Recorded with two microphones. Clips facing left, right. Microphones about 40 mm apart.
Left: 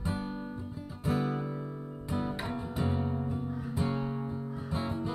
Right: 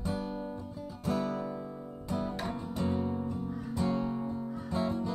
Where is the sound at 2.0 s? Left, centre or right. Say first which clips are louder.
Even; left.